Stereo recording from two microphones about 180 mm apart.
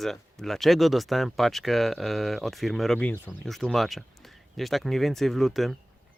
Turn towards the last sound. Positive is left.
turn(degrees=0)  # may be behind; listen again after turning